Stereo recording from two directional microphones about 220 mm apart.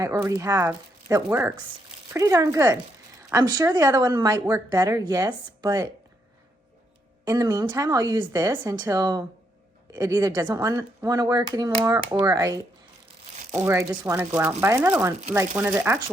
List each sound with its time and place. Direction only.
0.0 s speech: 15° right (ahead or behind)
7.3 s speech: 15° right (ahead or behind)
13.6 s speech: 10° right (ahead or behind)